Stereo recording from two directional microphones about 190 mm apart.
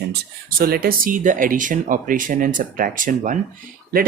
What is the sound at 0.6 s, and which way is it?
Speech, 50° right (ahead or behind).